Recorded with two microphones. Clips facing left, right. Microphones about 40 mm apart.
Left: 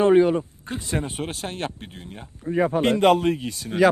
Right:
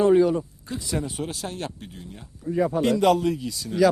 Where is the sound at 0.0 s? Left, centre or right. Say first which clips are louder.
Left 1 dB; left.